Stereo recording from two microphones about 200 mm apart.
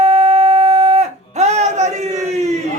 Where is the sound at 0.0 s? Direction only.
30° right (ahead or behind).